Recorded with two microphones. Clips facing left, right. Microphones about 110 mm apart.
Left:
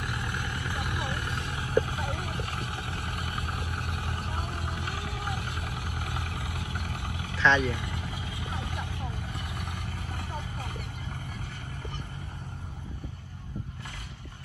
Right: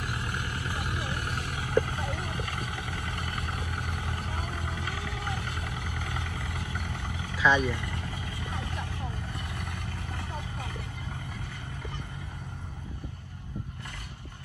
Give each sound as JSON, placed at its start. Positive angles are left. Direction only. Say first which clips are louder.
{"t": 1.4, "sound": "a sound", "louder": "even", "side_deg": -70}
{"t": 1.8, "sound": "a sound", "louder": "even", "side_deg": 20}
{"t": 3.7, "sound": "vehicle", "louder": "even", "side_deg": 20}
{"t": 7.3, "sound": "vehicle", "louder": "even", "side_deg": -10}
{"t": 7.6, "sound": "speech", "louder": "even", "side_deg": 25}
{"t": 8.0, "sound": "vehicle", "louder": "even", "side_deg": 20}